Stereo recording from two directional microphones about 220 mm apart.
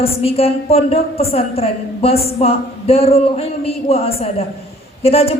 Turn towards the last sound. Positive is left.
turn(degrees=25)  # may be behind; listen again after turning